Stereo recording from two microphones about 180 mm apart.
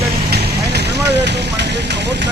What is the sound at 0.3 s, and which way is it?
Vehicle, 65° right (ahead or behind).